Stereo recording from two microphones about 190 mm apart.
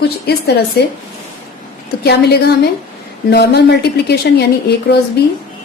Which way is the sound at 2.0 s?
60° left (ahead or behind).